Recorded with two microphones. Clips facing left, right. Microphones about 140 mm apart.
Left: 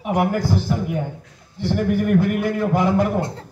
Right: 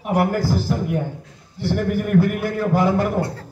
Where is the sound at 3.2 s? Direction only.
20° left (ahead or behind).